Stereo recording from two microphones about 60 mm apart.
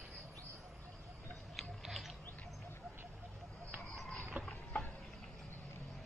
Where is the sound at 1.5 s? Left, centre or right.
Centre.